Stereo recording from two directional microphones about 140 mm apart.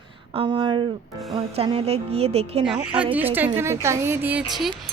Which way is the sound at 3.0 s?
10° right (ahead or behind).